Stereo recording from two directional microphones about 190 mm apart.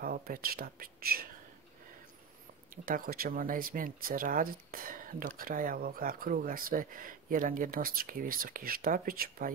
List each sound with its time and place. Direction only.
0.0 s speech: 50° right (ahead or behind)
2.7 s speech: 50° right (ahead or behind)